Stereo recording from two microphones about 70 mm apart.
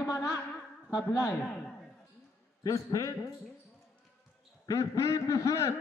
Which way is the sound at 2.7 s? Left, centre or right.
Left.